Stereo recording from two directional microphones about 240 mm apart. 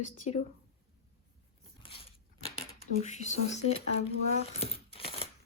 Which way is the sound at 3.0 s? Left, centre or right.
Left.